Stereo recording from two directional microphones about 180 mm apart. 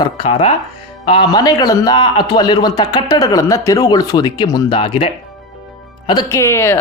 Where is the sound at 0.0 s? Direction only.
30° left (ahead or behind).